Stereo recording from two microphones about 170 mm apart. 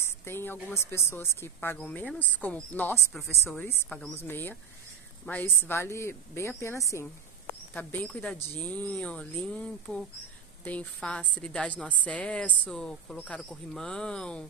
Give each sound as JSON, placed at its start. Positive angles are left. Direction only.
{"t": 0.0, "sound": "speech", "side_deg": 15}